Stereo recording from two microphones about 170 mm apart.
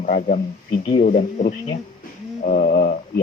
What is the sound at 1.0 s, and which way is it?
Speech, 55° left (ahead or behind).